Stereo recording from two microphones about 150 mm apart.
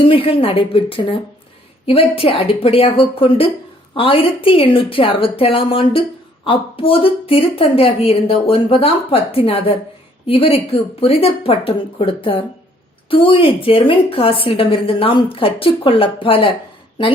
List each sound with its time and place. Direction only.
0.0 s a woman's voice: 40° left (ahead or behind)